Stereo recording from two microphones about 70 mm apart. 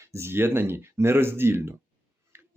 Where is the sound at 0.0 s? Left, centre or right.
Right.